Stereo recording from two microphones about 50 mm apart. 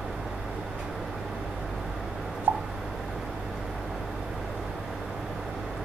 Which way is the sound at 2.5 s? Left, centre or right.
Right.